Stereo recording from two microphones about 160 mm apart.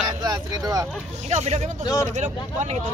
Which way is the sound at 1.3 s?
45° right (ahead or behind).